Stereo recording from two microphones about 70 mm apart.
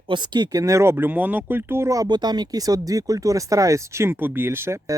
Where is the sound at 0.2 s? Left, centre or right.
Right.